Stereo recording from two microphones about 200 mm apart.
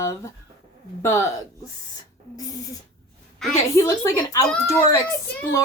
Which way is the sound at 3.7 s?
15° left (ahead or behind).